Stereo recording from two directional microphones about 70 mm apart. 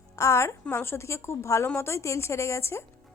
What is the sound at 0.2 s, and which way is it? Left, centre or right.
A woman's voice, left.